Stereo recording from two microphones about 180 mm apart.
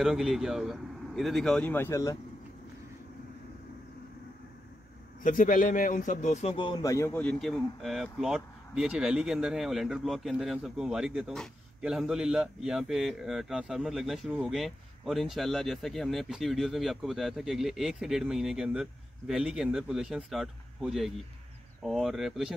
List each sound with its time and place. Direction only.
0.0 s a man's voice: centre (ahead or behind); by 2.1 s 15° left (ahead or behind)
5.2 s a man's voice: 50° left (ahead or behind); by 22.5 s centre (ahead or behind)